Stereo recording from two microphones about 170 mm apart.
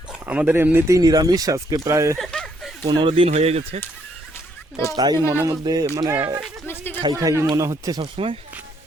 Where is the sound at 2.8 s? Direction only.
30° right (ahead or behind).